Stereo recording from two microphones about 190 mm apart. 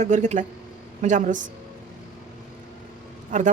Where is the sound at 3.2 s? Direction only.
40° right (ahead or behind).